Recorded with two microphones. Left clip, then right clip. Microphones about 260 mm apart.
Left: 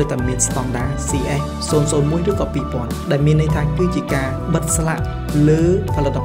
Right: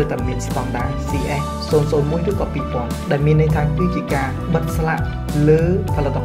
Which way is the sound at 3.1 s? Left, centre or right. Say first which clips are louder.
Right 1 dB; left.